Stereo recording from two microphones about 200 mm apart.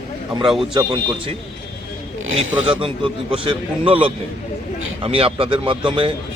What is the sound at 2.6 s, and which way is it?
A man's voice, 25° right (ahead or behind).